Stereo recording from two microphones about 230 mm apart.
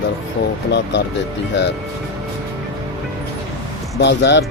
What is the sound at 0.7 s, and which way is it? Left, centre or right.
Speech, left.